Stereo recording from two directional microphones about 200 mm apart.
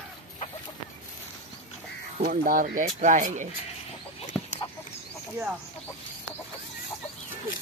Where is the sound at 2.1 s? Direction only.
45° right (ahead or behind).